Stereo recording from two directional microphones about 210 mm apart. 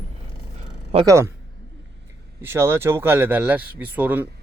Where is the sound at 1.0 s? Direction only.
15° right (ahead or behind).